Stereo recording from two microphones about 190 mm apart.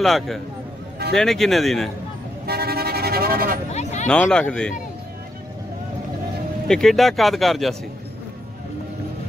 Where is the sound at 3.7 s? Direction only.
35° left (ahead or behind).